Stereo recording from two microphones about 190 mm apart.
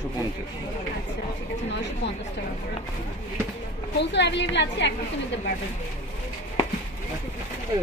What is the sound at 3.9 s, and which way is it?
Speech, 65° left (ahead or behind).